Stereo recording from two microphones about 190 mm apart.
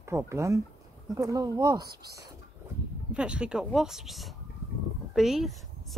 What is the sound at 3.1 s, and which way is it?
Speech, 5° right (ahead or behind).